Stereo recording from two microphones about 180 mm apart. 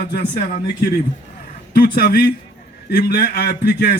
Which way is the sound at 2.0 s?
60° left (ahead or behind).